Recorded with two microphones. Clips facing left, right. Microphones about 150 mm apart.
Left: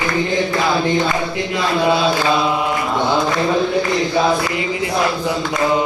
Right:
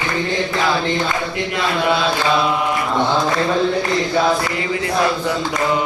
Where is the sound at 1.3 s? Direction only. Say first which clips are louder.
Left 2 dB; 20° left (ahead or behind).